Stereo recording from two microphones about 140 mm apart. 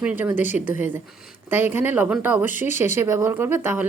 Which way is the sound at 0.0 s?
10° right (ahead or behind).